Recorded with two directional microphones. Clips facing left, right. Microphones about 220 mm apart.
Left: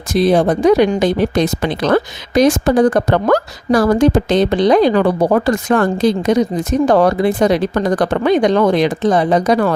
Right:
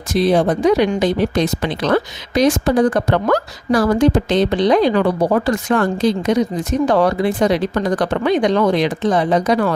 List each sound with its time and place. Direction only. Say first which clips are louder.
0.1 s speech: left 2 dB; 45° left (ahead or behind)